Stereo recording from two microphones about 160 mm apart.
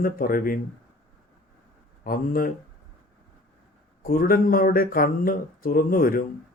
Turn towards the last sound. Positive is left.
turn(degrees=60)  # may be behind; listen again after turning